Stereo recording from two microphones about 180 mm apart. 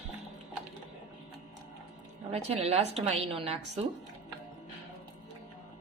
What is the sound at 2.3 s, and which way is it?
A woman's voice, 35° right (ahead or behind).